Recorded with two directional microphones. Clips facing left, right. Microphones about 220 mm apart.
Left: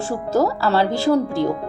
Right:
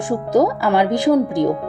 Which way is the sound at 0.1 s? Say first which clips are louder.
Right 4 dB; 15° right (ahead or behind).